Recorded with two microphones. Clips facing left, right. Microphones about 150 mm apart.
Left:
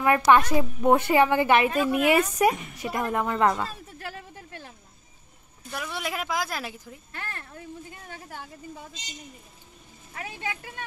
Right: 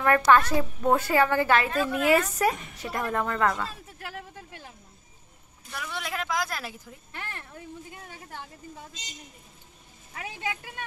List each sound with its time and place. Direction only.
0.0 s a woman's voice: 15° left (ahead or behind)
5.7 s a woman's voice: 10° left (ahead or behind)
7.1 s speech: 15° right (ahead or behind)